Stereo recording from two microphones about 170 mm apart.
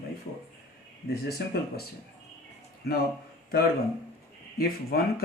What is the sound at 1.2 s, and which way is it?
Speech, 65° left (ahead or behind).